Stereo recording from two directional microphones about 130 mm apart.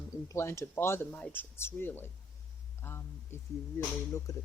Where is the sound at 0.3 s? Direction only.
20° left (ahead or behind).